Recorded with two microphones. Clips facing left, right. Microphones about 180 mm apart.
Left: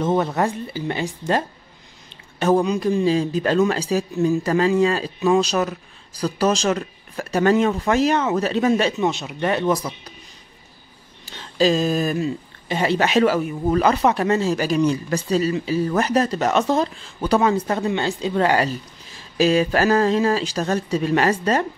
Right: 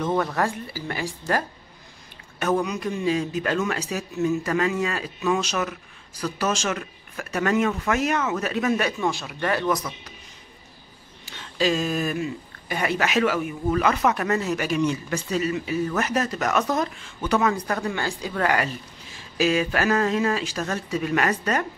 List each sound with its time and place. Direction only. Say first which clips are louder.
0.0 s a man's voice: left 4 dB; 25° left (ahead or behind)
11.3 s a man's voice: left 5 dB; 35° left (ahead or behind)